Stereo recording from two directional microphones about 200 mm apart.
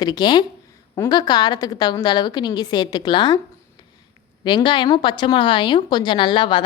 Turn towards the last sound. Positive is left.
turn(degrees=25)  # may be behind; listen again after turning